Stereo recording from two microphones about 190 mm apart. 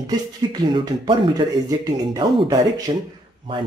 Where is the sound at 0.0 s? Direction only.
25° right (ahead or behind).